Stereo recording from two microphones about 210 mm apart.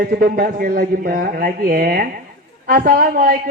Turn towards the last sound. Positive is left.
turn(degrees=-40)  # may be behind; listen again after turning